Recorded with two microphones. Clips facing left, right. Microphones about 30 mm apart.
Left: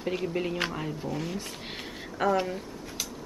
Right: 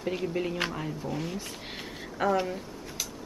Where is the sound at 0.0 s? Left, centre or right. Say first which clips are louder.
Even; centre.